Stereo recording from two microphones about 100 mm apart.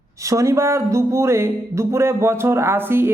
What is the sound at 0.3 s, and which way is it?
Speech, 30° right (ahead or behind).